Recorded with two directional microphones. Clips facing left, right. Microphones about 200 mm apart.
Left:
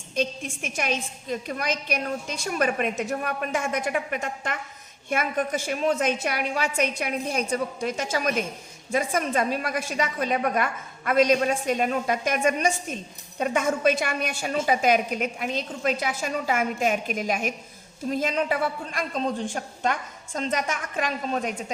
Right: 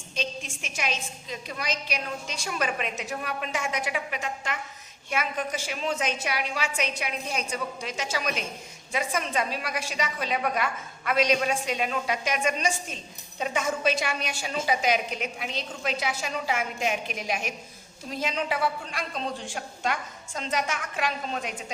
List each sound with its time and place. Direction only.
0.2 s a woman's voice: 55° left (ahead or behind)